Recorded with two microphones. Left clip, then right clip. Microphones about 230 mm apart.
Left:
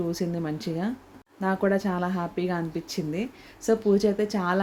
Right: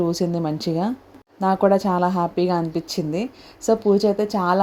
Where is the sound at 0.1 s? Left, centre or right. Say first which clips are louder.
Right 7 dB; right.